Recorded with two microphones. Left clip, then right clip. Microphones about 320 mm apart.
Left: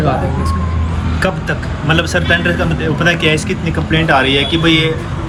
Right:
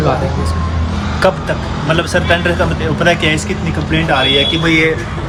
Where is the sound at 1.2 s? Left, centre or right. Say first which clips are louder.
Right 4 dB; centre.